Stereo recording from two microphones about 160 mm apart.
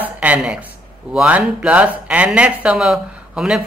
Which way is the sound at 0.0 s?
10° right (ahead or behind).